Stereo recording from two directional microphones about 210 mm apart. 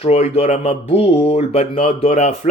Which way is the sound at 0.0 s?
30° left (ahead or behind).